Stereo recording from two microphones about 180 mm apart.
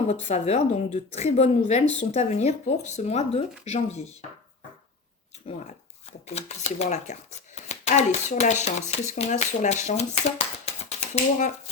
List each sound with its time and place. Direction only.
0.1 s a woman's voice: 40° left (ahead or behind)
6.2 s a woman's voice: 35° left (ahead or behind)